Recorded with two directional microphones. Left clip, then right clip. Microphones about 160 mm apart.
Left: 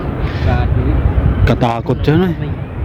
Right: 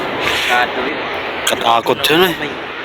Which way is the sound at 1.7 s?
15° left (ahead or behind).